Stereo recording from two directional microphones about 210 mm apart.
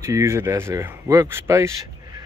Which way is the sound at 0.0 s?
15° right (ahead or behind).